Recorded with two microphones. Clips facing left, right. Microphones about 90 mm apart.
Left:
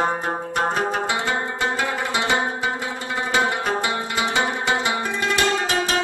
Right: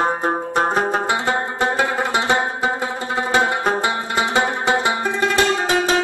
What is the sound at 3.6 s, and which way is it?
Music, 30° right (ahead or behind).